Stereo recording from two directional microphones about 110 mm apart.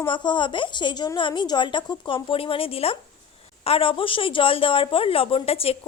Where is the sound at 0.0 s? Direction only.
45° left (ahead or behind).